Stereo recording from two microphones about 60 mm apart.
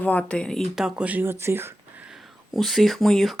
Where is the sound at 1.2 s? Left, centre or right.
Right.